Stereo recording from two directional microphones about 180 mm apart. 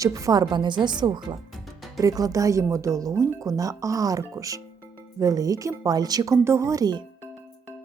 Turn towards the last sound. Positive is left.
turn(degrees=-20)  # may be behind; listen again after turning